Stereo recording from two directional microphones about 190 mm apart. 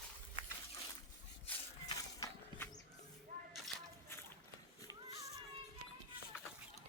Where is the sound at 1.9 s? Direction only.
20° left (ahead or behind).